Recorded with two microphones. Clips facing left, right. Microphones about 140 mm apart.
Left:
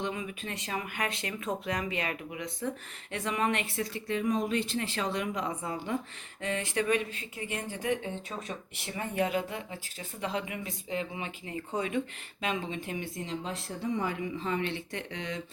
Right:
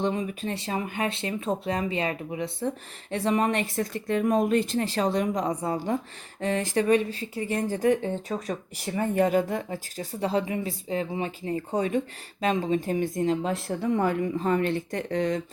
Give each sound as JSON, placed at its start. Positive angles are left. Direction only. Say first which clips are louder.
{"t": 0.0, "sound": "speech", "louder": "right 8 dB", "side_deg": -35}